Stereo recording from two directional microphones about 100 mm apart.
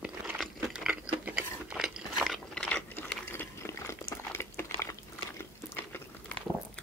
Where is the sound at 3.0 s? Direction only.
20° left (ahead or behind).